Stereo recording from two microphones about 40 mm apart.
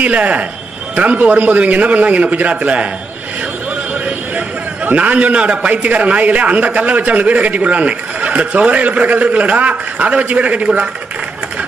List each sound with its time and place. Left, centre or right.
0.0 s speech: right
4.8 s speech: right